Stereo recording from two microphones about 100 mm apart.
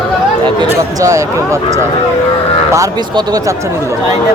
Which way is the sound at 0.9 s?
35° right (ahead or behind).